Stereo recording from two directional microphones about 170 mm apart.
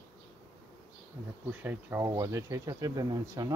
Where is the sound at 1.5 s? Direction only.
10° right (ahead or behind).